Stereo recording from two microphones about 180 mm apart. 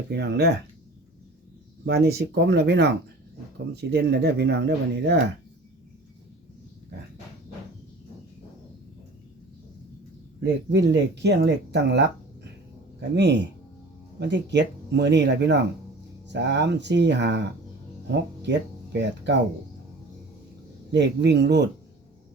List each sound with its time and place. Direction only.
0.1 s speech: 70° right (ahead or behind)
1.8 s speech: 60° right (ahead or behind)
10.4 s speech: 70° right (ahead or behind)
20.9 s speech: 75° right (ahead or behind)